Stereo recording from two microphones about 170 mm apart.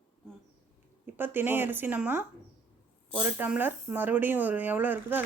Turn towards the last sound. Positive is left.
turn(degrees=-10)  # may be behind; listen again after turning